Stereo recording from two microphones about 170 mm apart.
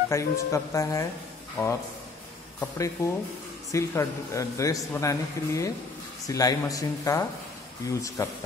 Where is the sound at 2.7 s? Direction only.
20° left (ahead or behind).